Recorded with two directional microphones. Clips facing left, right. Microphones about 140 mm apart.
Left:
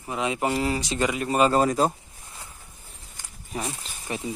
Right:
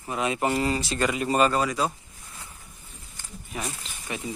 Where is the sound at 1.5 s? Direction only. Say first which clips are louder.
Left 4 dB; 45° left (ahead or behind).